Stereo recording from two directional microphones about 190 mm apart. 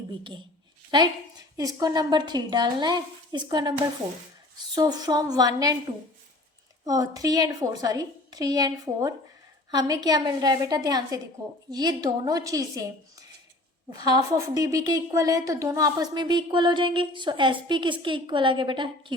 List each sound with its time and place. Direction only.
0.9 s a woman's voice: 25° right (ahead or behind)
4.7 s a woman's voice: 20° right (ahead or behind)
6.8 s a woman's voice: 20° right (ahead or behind)